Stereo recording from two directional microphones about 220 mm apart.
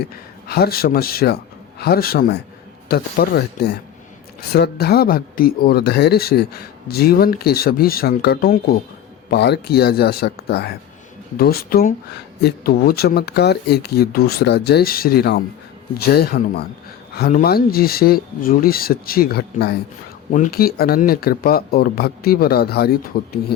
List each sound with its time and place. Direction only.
0.4 s speech: 45° left (ahead or behind)